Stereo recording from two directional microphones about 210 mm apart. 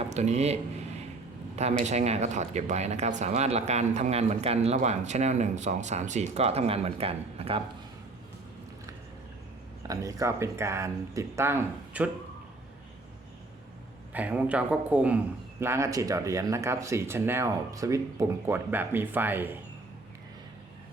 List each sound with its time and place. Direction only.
0.0 s speech: 30° right (ahead or behind)
1.8 s speech: 30° right (ahead or behind)
9.8 s speech: 15° right (ahead or behind)
14.1 s speech: 5° right (ahead or behind)